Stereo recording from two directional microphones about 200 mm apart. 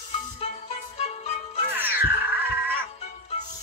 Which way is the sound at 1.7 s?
10° right (ahead or behind).